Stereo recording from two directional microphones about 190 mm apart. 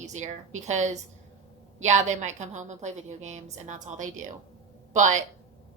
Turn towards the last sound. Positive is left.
turn(degrees=-40)  # may be behind; listen again after turning